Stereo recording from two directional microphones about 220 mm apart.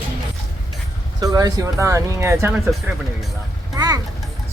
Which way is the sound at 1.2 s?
15° right (ahead or behind).